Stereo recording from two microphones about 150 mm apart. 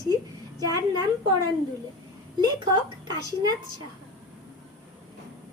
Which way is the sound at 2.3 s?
30° right (ahead or behind).